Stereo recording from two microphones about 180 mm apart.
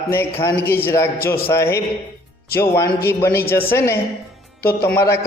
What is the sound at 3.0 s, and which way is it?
A man's voice, 15° left (ahead or behind).